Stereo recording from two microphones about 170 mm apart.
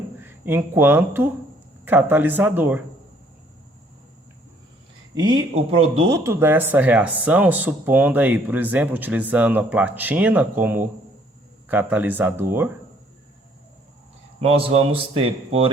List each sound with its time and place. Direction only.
0.3 s speech: 10° right (ahead or behind)
5.1 s speech: 25° right (ahead or behind)
14.4 s speech: 35° right (ahead or behind)